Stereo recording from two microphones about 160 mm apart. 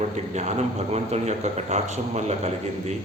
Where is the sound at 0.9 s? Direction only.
45° right (ahead or behind).